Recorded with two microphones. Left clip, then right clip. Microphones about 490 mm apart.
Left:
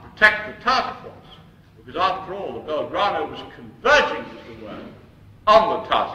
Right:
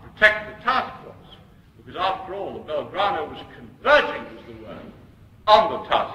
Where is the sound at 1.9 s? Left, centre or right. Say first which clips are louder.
Left 3 dB; left.